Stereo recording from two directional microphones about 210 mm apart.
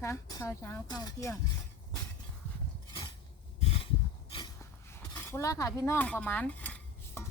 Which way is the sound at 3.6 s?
25° left (ahead or behind).